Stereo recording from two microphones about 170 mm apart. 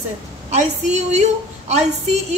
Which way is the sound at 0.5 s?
40° right (ahead or behind).